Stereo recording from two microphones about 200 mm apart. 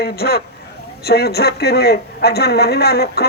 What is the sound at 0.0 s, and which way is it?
A woman's voice, 50° left (ahead or behind).